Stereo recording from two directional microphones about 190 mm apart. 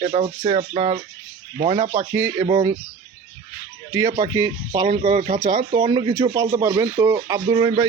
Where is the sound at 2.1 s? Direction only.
10° right (ahead or behind).